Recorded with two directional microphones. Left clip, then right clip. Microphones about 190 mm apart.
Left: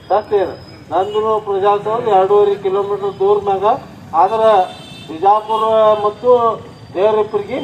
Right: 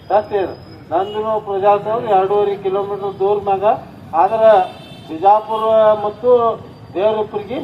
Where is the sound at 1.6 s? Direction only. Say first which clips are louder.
Right 4 dB; 20° right (ahead or behind).